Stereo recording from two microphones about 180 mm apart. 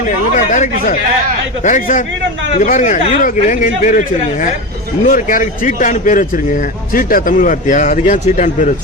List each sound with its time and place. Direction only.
0.3 s a man's voice: 45° left (ahead or behind)
5.0 s a man's voice: 50° left (ahead or behind)